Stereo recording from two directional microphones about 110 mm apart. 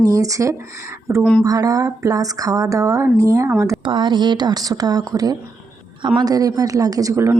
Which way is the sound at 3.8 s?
45° right (ahead or behind).